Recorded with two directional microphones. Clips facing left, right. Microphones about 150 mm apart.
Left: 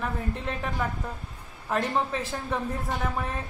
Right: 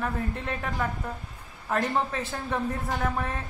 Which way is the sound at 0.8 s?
10° left (ahead or behind).